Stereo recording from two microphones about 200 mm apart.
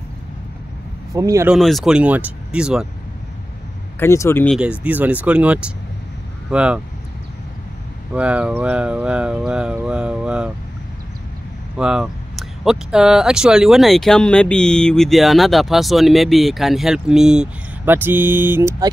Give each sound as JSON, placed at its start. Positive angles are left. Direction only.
{"t": 1.1, "sound": "speech", "side_deg": -15}
{"t": 1.5, "sound": "speech", "side_deg": 0}
{"t": 4.0, "sound": "speech", "side_deg": 15}
{"t": 4.6, "sound": "speech", "side_deg": -5}
{"t": 8.1, "sound": "speech", "side_deg": -5}
{"t": 11.7, "sound": "speech", "side_deg": -5}